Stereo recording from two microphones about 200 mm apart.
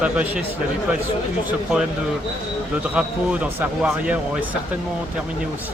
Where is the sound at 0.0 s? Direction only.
5° right (ahead or behind).